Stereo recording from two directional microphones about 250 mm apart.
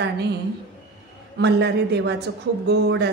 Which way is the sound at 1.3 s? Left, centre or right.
Right.